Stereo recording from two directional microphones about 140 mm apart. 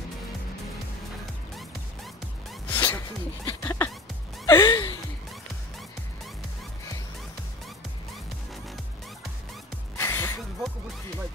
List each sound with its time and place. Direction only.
2.7 s music: 15° left (ahead or behind)
3.4 s a sound: 15° left (ahead or behind)
4.5 s gasp: 25° left (ahead or behind)
9.9 s music: 15° left (ahead or behind)